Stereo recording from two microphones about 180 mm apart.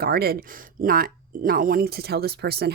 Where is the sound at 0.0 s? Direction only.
60° right (ahead or behind).